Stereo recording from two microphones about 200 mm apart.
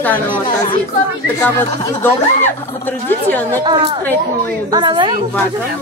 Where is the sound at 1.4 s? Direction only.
15° left (ahead or behind).